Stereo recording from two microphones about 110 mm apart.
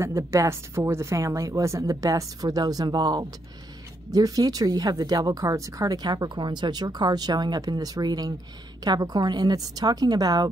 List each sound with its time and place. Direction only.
0.0 s a woman's voice: 25° right (ahead or behind)